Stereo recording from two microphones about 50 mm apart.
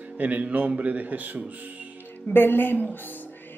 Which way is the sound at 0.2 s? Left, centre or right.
Right.